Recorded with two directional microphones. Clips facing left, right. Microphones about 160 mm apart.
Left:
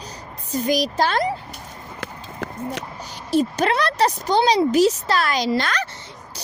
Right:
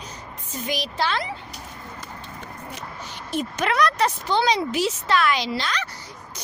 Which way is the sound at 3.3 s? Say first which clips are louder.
Left 6 dB; 35° left (ahead or behind).